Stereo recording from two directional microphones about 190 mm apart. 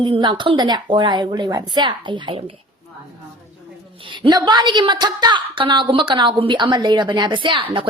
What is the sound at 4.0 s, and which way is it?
A woman's voice, 25° right (ahead or behind).